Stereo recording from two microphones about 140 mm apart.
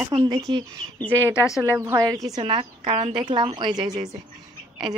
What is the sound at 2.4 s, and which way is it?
A woman's voice, 40° right (ahead or behind).